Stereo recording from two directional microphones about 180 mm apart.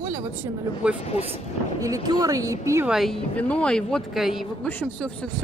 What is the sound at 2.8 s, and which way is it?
Speech, centre (ahead or behind).